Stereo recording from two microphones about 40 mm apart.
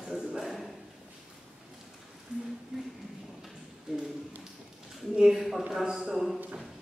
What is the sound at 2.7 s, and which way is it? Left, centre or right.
Speech, centre.